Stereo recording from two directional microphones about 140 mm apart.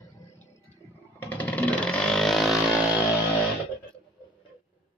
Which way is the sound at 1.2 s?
15° left (ahead or behind).